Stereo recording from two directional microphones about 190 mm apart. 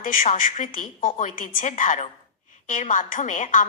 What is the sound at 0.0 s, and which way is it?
A woman's voice, 40° left (ahead or behind).